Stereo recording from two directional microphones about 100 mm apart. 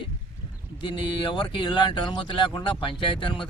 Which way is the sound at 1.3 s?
55° left (ahead or behind).